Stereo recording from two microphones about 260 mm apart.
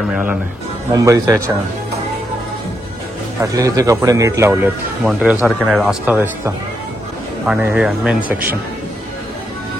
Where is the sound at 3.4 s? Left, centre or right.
Centre.